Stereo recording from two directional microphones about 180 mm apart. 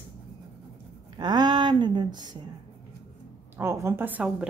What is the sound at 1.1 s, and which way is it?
Speech, 25° right (ahead or behind).